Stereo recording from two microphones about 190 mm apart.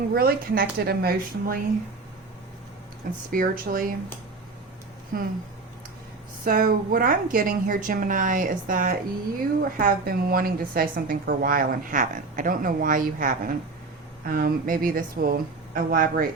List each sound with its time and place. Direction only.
0.1 s a woman's voice: 50° right (ahead or behind)
3.3 s a woman's voice: 45° right (ahead or behind)
5.1 s a woman's voice: 50° right (ahead or behind)
6.4 s a woman's voice: 50° right (ahead or behind)